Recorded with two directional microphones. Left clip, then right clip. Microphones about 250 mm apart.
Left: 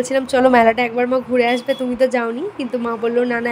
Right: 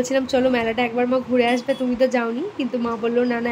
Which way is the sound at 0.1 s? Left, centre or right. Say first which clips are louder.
Left 7 dB; centre.